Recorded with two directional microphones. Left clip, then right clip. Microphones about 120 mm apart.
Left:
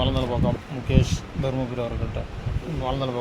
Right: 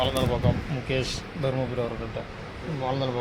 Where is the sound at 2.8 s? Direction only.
20° left (ahead or behind).